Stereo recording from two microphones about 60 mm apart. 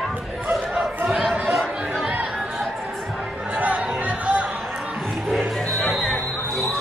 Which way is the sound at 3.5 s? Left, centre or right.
Right.